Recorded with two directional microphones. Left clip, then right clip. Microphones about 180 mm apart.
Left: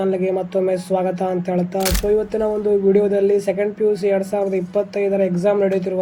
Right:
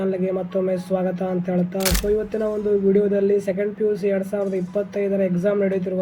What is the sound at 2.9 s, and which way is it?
Speech, 20° left (ahead or behind).